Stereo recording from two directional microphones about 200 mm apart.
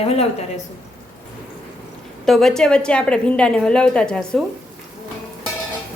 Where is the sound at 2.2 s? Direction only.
Centre (ahead or behind).